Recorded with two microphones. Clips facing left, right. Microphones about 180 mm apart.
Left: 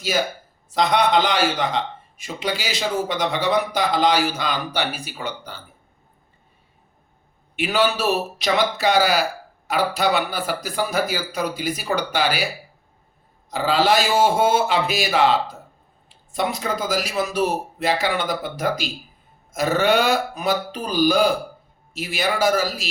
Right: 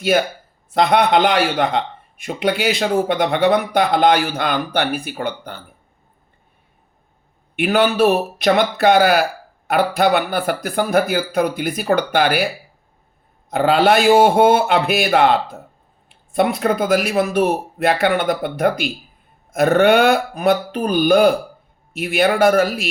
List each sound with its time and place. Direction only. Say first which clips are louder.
0.0 s a man's voice: right 6 dB; 60° right (ahead or behind)
7.5 s a man's voice: right 4 dB; 55° right (ahead or behind)
13.5 s a man's voice: right 5 dB; 60° right (ahead or behind)